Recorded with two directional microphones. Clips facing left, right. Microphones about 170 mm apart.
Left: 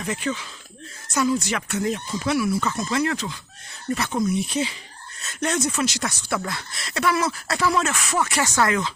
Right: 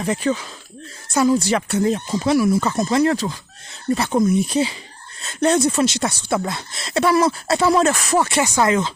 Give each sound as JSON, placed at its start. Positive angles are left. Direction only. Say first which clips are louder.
{"t": 0.0, "sound": "speech", "louder": "right 6 dB", "side_deg": -35}
{"t": 4.2, "sound": "speech", "louder": "right 5 dB", "side_deg": -50}
{"t": 7.7, "sound": "speech", "louder": "right 9 dB", "side_deg": -35}
{"t": 8.4, "sound": "speech", "louder": "right 4 dB", "side_deg": -20}